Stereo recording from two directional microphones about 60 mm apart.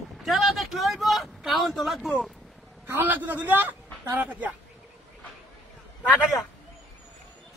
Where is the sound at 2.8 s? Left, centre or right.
Right.